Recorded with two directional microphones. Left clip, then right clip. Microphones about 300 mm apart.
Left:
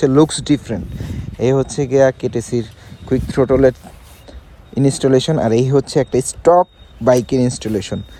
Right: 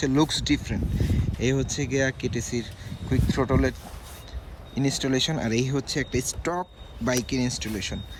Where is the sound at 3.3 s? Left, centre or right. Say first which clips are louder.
Left 13 dB; right.